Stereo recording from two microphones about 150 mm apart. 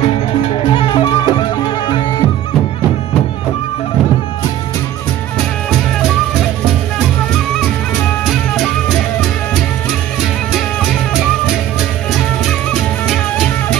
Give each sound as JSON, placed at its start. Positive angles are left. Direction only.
{"t": 0.7, "sound": "music", "side_deg": 35}
{"t": 8.3, "sound": "music", "side_deg": 0}
{"t": 12.1, "sound": "music", "side_deg": 0}